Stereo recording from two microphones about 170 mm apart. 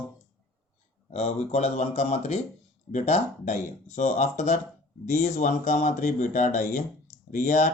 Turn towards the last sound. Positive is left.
turn(degrees=45)  # may be behind; listen again after turning